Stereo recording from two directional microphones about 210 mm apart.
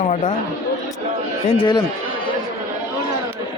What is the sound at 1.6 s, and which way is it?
Speech, 20° left (ahead or behind).